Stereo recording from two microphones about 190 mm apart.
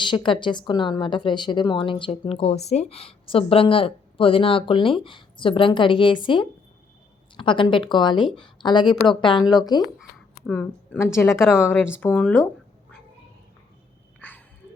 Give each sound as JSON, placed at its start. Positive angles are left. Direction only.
{"t": 0.0, "sound": "a woman's voice", "side_deg": 25}
{"t": 10.4, "sound": "a woman's voice", "side_deg": 5}
{"t": 14.2, "sound": "a sound", "side_deg": 10}